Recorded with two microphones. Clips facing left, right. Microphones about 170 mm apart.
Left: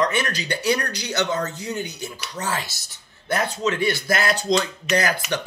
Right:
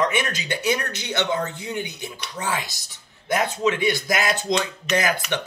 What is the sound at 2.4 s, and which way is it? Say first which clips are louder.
Speech: even; 15° right (ahead or behind).